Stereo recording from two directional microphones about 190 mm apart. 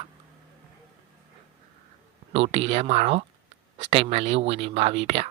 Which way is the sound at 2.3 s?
30° right (ahead or behind).